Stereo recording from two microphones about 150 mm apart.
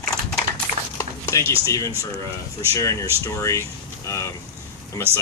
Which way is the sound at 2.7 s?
20° left (ahead or behind).